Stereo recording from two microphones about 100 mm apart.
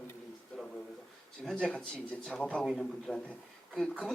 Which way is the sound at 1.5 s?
10° left (ahead or behind).